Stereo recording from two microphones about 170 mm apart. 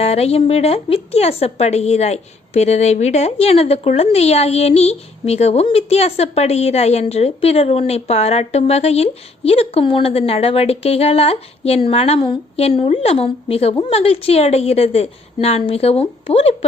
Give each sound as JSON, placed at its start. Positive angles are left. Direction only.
{"t": 0.0, "sound": "a woman's voice", "side_deg": 40}